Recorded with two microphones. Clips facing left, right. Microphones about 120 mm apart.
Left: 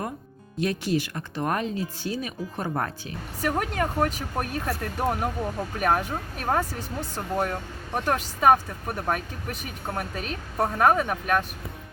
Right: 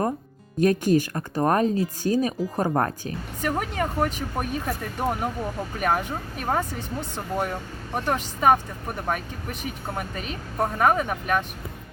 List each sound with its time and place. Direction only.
0.6 s speech: 45° right (ahead or behind)
3.4 s speech: 5° left (ahead or behind)